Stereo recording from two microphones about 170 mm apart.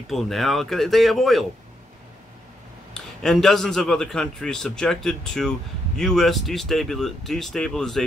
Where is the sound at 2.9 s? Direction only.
5° left (ahead or behind).